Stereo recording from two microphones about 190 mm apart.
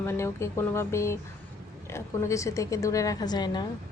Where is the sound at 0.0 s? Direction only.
15° left (ahead or behind).